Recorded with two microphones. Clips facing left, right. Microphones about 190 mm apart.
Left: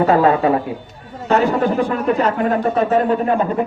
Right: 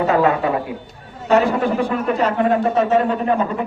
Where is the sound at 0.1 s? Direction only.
35° left (ahead or behind).